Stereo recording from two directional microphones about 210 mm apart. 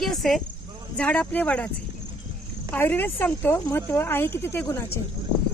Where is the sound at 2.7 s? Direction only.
10° left (ahead or behind).